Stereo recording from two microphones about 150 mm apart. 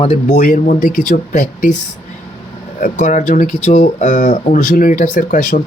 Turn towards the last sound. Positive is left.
turn(degrees=60)  # may be behind; listen again after turning